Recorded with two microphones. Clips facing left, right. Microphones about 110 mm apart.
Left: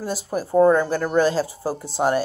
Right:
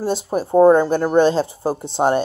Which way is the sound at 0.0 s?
25° right (ahead or behind).